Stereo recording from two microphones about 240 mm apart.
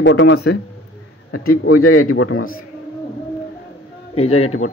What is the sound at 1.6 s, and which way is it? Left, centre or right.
Speech, left.